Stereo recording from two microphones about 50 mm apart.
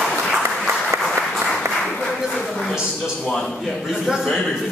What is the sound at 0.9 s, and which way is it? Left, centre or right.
Applause, right.